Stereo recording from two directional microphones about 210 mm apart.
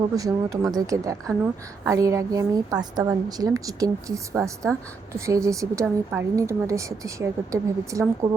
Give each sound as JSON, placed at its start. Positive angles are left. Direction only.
{"t": 0.2, "sound": "a woman's voice", "side_deg": -15}